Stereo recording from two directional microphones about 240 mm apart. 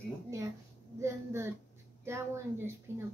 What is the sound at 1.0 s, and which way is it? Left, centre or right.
A woman's voice, centre.